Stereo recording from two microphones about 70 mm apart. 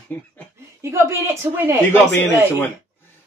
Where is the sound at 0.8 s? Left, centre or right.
Right.